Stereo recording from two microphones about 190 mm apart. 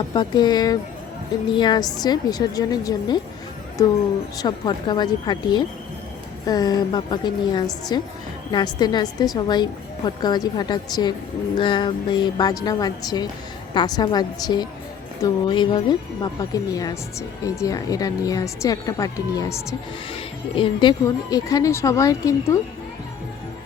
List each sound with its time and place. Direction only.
0.1 s speech: 25° left (ahead or behind)
4.4 s speech: 20° left (ahead or behind)